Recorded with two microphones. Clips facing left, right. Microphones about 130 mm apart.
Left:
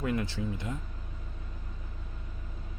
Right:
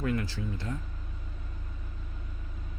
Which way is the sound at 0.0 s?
20° left (ahead or behind).